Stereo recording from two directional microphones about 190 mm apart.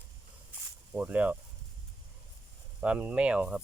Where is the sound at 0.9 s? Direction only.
10° right (ahead or behind).